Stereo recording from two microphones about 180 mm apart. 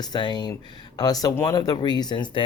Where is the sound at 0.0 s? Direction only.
25° left (ahead or behind).